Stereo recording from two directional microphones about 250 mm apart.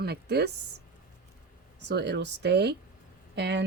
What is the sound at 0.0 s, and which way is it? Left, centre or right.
Speech, right.